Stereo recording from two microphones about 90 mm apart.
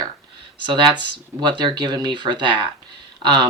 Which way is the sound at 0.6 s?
60° right (ahead or behind).